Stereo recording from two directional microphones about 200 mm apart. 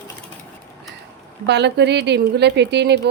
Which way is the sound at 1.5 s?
55° right (ahead or behind).